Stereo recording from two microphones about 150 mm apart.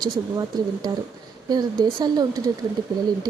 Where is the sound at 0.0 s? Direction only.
25° right (ahead or behind).